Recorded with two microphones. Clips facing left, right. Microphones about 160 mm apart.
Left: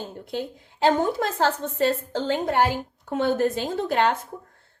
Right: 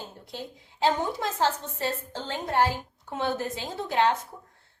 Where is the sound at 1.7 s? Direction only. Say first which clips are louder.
Left 8 dB; 70° left (ahead or behind).